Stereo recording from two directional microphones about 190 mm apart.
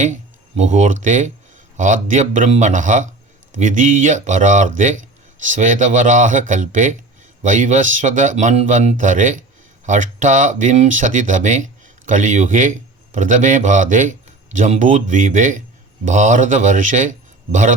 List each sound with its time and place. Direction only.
0.0 s a man's voice: 40° right (ahead or behind)